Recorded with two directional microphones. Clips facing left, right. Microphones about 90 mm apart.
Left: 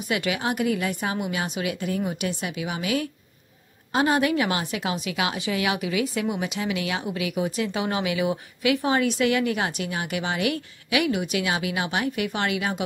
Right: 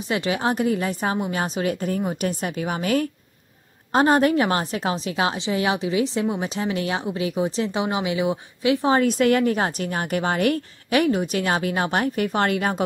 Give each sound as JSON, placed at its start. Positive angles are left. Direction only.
{"t": 0.1, "sound": "a woman's voice", "side_deg": -30}